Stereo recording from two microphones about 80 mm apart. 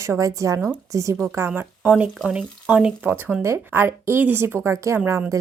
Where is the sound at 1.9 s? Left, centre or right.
Centre.